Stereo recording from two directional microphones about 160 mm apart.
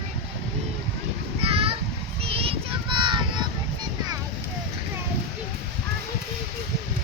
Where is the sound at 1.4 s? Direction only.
35° right (ahead or behind).